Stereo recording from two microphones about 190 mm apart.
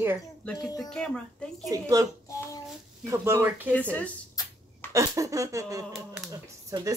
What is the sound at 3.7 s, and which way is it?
Speech, 5° left (ahead or behind).